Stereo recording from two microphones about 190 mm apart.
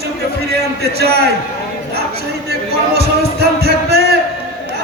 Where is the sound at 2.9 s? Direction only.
55° right (ahead or behind).